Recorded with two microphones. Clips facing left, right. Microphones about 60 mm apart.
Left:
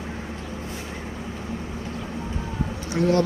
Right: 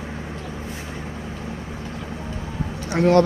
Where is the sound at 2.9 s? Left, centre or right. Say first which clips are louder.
Right 5 dB; right.